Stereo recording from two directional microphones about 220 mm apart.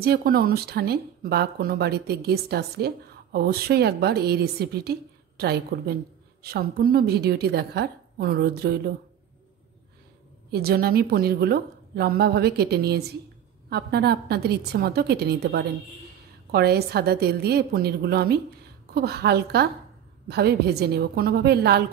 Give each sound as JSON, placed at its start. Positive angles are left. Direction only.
{"t": 0.0, "sound": "speech", "side_deg": -45}
{"t": 10.5, "sound": "speech", "side_deg": -45}